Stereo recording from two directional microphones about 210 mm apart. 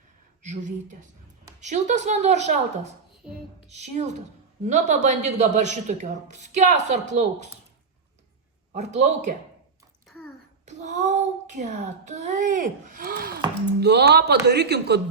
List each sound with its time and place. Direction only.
0.4 s speech: 35° right (ahead or behind)
8.7 s speech: 35° right (ahead or behind)
10.7 s a child's voice: 35° right (ahead or behind); by 15.0 s 50° right (ahead or behind)